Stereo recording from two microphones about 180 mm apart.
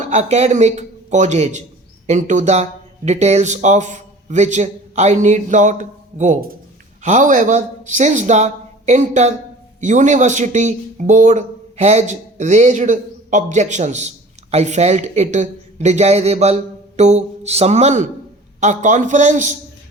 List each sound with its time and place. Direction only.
0.0 s speech: 40° right (ahead or behind)